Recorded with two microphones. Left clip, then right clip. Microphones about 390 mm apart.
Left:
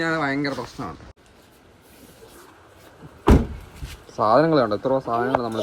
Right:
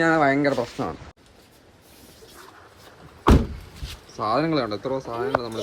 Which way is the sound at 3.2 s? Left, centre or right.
Centre.